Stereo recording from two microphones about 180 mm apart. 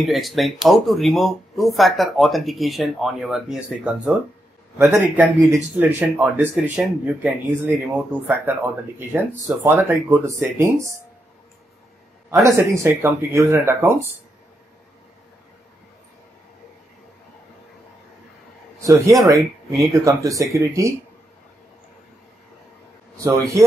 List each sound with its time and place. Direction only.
0.0 s speech: centre (ahead or behind)
9.6 s speech: 10° right (ahead or behind)
12.3 s speech: 15° right (ahead or behind)
18.8 s speech: 15° right (ahead or behind)
23.1 s speech: 15° right (ahead or behind)